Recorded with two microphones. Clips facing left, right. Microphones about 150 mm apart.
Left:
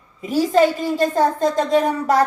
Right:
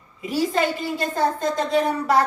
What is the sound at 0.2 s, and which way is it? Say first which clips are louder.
A woman's voice: left 6 dB; 40° left (ahead or behind).